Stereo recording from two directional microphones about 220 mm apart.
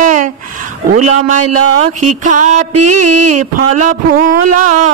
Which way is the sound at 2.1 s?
35° right (ahead or behind).